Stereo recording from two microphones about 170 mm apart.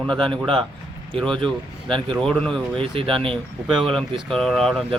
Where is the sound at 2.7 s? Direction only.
30° right (ahead or behind).